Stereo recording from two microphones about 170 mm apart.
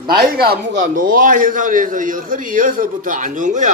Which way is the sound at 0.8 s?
50° right (ahead or behind).